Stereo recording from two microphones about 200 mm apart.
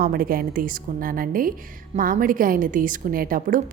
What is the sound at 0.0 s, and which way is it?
A woman's voice, 45° right (ahead or behind).